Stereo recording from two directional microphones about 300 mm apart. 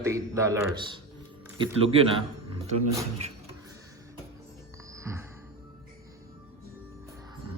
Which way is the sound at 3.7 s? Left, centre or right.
Centre.